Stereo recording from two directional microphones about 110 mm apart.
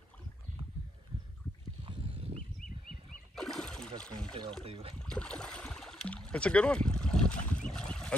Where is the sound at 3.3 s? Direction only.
5° left (ahead or behind).